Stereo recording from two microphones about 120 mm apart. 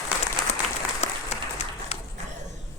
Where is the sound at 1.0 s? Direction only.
65° left (ahead or behind).